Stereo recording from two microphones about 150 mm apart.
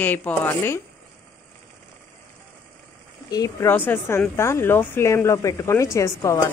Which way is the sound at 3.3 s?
25° left (ahead or behind).